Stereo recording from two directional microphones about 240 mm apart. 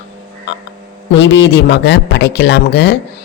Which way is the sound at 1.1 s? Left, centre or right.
Left.